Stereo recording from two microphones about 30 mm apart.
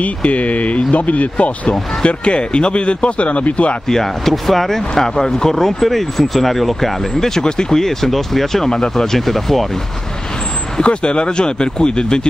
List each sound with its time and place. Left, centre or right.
0.0 s speech: left
2.0 s speech: left
3.9 s speech: centre
7.2 s speech: centre
7.8 s speech: centre
8.6 s speech: centre
10.8 s speech: left